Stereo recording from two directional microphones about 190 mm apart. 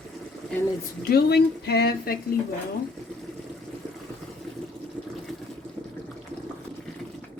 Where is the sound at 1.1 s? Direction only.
60° left (ahead or behind).